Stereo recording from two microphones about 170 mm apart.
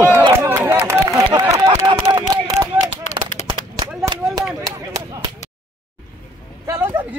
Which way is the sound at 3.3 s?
45° left (ahead or behind).